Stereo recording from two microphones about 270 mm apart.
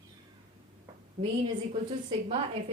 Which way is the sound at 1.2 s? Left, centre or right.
Right.